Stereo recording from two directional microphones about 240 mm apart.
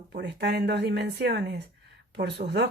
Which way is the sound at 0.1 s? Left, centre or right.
Right.